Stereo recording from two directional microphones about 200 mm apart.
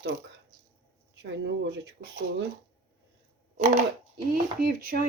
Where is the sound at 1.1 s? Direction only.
65° right (ahead or behind).